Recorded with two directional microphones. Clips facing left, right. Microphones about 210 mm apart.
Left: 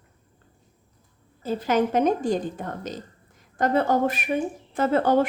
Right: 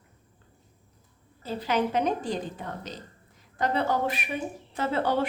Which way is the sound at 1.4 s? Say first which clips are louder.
Left 5 dB; 45° left (ahead or behind).